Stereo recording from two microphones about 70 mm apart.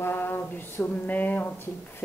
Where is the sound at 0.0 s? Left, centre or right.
Left.